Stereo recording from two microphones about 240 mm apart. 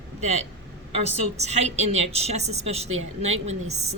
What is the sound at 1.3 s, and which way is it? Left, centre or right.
A woman's voice, right.